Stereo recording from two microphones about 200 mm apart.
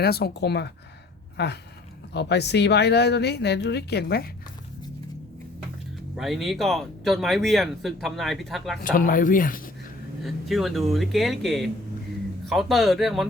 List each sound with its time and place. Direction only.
0.0 s speech: 50° left (ahead or behind)
6.1 s speech: centre (ahead or behind)
8.8 s speech: 45° left (ahead or behind)
10.2 s speech: centre (ahead or behind)